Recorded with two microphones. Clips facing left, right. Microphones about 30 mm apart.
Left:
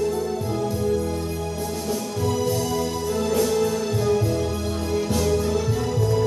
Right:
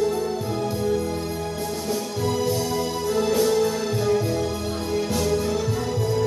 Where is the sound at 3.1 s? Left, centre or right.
Right.